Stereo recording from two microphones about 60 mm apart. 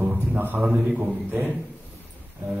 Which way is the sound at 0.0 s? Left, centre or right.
Right.